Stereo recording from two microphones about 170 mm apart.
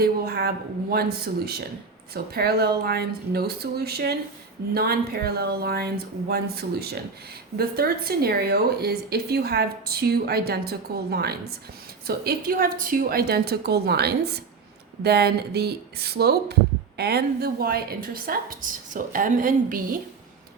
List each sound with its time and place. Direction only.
0.0 s a woman's voice: 70° right (ahead or behind)